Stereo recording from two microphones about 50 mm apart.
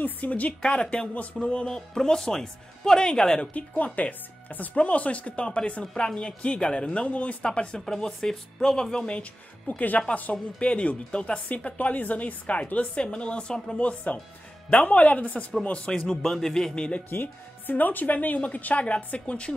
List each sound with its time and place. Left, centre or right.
0.0 s speech: left
1.7 s speech: centre
3.5 s speech: left
7.8 s speech: centre; by 16.0 s left
16.0 s speech: centre
17.1 s speech: left